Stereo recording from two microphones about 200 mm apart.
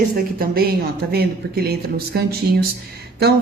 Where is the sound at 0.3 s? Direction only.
50° right (ahead or behind).